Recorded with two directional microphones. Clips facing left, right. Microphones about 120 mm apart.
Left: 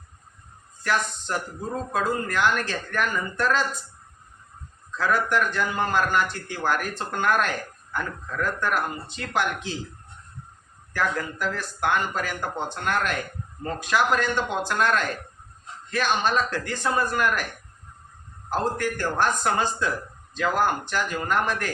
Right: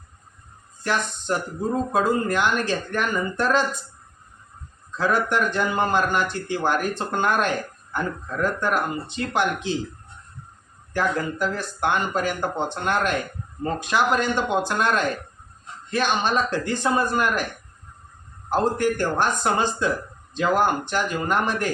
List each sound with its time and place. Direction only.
1.3 s speech: 20° right (ahead or behind)
4.9 s speech: 25° right (ahead or behind)
10.9 s speech: 25° right (ahead or behind)
18.5 s speech: 20° right (ahead or behind)